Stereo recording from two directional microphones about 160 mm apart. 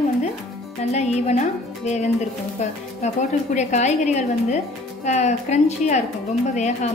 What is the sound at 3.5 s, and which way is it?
A woman's voice, 45° left (ahead or behind).